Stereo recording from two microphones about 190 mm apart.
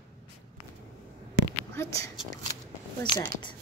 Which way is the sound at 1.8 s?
15° left (ahead or behind).